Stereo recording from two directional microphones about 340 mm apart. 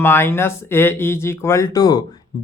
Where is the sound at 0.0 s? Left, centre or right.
Centre.